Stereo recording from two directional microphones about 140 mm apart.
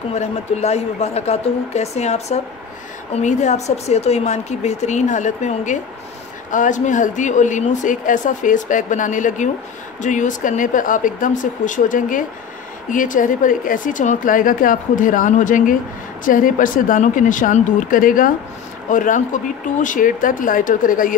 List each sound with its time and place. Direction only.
0.1 s a woman's voice: 50° left (ahead or behind); by 21.2 s 75° left (ahead or behind)